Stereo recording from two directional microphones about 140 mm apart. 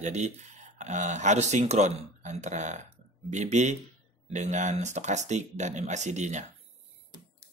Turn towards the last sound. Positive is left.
turn(degrees=-55)  # may be behind; listen again after turning